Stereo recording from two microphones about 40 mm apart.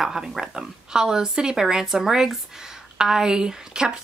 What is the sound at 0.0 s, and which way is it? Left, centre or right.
Speech, centre.